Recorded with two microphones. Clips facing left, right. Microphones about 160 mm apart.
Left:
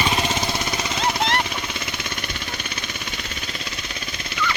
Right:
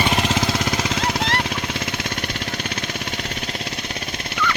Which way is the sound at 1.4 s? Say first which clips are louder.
Right 4 dB; 80° right.